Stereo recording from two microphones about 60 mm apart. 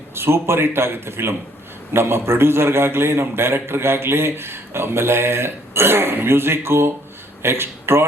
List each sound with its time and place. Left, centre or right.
0.1 s a man's voice: right